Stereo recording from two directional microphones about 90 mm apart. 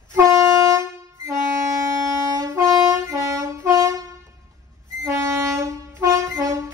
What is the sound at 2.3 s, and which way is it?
Wind instrument, 40° right (ahead or behind).